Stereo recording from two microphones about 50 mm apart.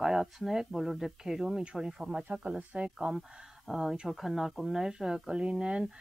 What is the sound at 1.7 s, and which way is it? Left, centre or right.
Speech, centre.